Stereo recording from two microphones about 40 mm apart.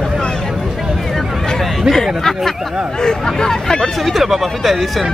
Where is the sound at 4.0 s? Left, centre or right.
Centre.